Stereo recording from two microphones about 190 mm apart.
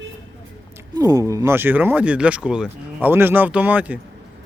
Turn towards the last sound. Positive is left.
turn(degrees=-5)  # may be behind; listen again after turning